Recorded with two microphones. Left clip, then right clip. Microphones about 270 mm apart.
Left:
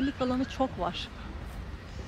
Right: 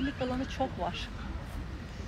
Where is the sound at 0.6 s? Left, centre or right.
Left.